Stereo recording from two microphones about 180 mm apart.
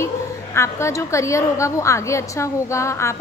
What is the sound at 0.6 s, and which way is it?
A woman's voice, 15° left (ahead or behind).